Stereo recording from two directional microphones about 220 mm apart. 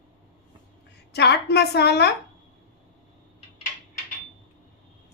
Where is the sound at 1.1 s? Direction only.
50° left (ahead or behind).